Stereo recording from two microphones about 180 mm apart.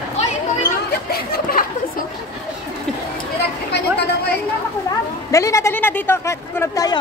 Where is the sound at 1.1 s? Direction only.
55° left (ahead or behind).